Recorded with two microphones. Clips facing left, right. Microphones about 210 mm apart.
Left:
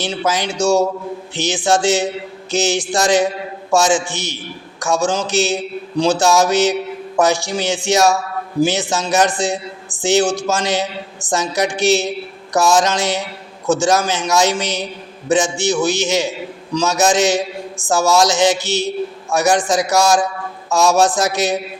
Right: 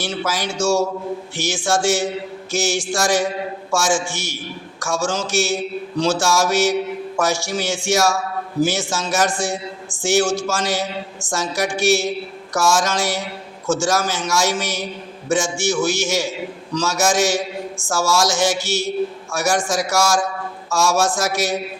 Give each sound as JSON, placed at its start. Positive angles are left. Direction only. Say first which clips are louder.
{"t": 0.5, "sound": "a man's voice", "louder": "left 2 dB", "side_deg": 15}